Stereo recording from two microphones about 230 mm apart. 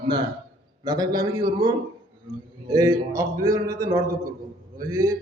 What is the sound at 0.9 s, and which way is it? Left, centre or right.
Speech, centre.